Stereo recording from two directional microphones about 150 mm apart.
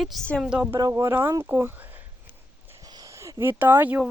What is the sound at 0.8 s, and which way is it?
Speech, 25° right (ahead or behind).